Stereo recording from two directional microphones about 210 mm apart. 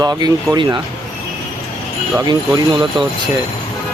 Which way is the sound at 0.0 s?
20° right (ahead or behind).